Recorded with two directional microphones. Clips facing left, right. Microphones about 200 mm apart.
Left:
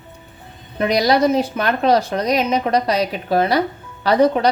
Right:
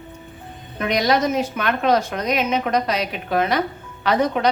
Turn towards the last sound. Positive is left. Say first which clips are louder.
# left 4 dB
turn(degrees=35)  # may be behind; listen again after turning